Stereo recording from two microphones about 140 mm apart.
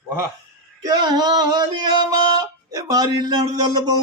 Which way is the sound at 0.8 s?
30° right (ahead or behind).